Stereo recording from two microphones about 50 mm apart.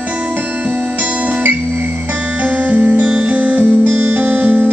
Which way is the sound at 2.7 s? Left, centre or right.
Right.